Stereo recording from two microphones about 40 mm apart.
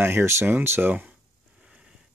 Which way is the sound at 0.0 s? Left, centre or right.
Right.